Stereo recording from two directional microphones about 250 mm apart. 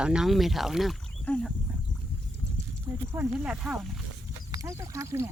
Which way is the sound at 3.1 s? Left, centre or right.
Centre.